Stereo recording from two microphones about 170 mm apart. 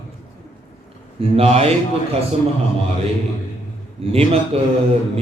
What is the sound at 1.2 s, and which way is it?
Speech, 35° right (ahead or behind).